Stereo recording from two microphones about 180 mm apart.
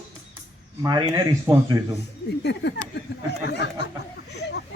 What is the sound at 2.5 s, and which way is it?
Speech, 70° left (ahead or behind).